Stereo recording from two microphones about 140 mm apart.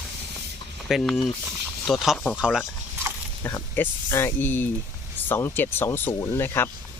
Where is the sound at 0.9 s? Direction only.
5° left (ahead or behind).